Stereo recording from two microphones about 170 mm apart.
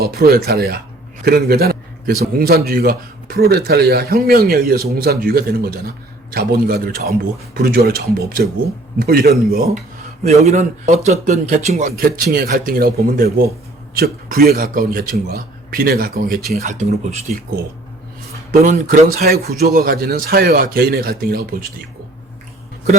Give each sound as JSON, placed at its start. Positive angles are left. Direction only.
{"t": 0.0, "sound": "a man's voice", "side_deg": -65}
{"t": 1.2, "sound": "a sound", "side_deg": -65}
{"t": 2.4, "sound": "a man's voice", "side_deg": -60}
{"t": 10.2, "sound": "speech", "side_deg": -40}
{"t": 11.9, "sound": "a man's voice", "side_deg": -60}
{"t": 18.6, "sound": "a man's voice", "side_deg": -50}